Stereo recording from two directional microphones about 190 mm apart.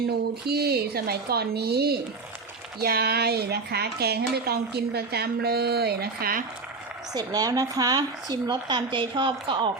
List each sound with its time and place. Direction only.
0.4 s speech: 55° right (ahead or behind)
7.1 s speech: 20° right (ahead or behind)